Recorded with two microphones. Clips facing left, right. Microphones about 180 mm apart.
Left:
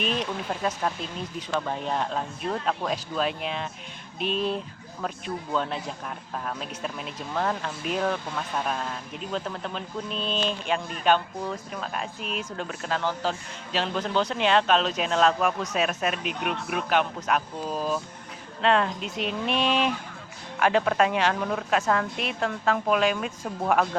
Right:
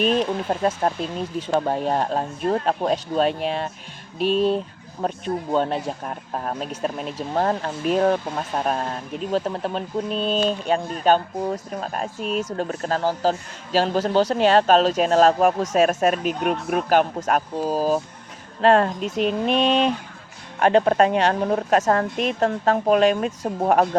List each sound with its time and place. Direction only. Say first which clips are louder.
0.0 s speech: right 8 dB; 40° right (ahead or behind)
4.2 s speech: right 8 dB; centre (ahead or behind)
4.5 s speech: right 7 dB; 35° right (ahead or behind)